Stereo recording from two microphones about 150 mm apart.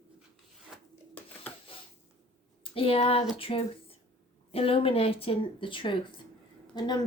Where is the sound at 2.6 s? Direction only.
40° left (ahead or behind).